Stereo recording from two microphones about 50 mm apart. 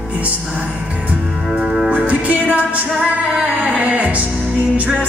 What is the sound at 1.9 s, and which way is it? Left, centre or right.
Music, right.